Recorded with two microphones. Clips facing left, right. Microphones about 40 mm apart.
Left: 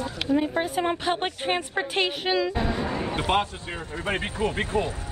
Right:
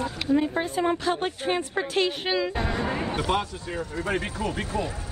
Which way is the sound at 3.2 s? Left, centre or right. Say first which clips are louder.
Left 2 dB; left.